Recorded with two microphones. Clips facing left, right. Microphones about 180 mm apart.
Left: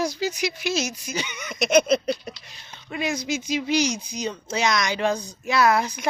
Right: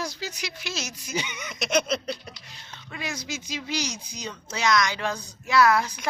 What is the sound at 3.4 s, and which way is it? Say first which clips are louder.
Speech: left 9 dB; 15° left (ahead or behind).